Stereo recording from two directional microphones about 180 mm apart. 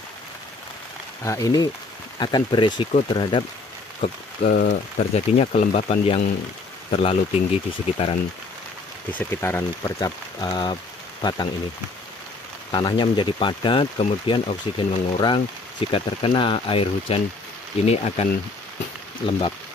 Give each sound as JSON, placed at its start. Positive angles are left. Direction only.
{"t": 1.2, "sound": "speech", "side_deg": 20}
{"t": 4.0, "sound": "speech", "side_deg": 50}
{"t": 9.1, "sound": "speech", "side_deg": 10}
{"t": 12.7, "sound": "speech", "side_deg": 25}